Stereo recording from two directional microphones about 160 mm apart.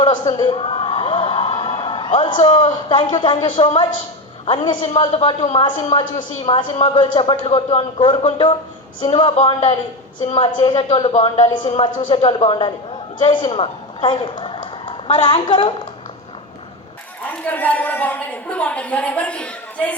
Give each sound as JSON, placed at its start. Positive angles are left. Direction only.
{"t": 0.0, "sound": "a woman's voice", "side_deg": 30}
{"t": 17.4, "sound": "a woman's voice", "side_deg": 10}